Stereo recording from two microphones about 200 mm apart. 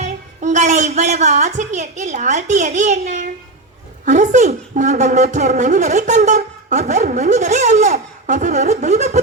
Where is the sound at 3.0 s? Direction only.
40° right (ahead or behind).